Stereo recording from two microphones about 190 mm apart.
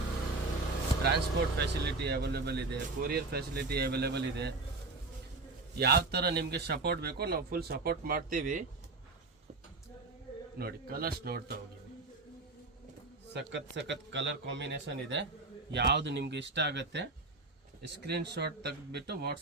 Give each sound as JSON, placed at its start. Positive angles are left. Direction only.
{"t": 1.0, "sound": "speech", "side_deg": -60}
{"t": 5.8, "sound": "speech", "side_deg": -60}
{"t": 10.6, "sound": "speech", "side_deg": -50}
{"t": 13.3, "sound": "a man's voice", "side_deg": -65}